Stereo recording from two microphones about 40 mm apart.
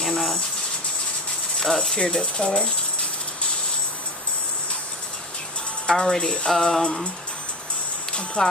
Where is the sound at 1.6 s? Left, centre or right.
Centre.